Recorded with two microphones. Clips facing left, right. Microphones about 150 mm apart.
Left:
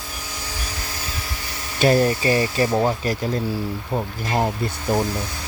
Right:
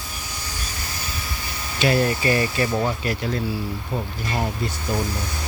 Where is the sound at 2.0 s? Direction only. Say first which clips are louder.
Left 2 dB; 30° left (ahead or behind).